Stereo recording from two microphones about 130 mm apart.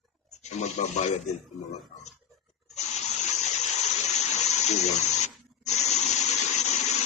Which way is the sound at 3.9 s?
60° left (ahead or behind).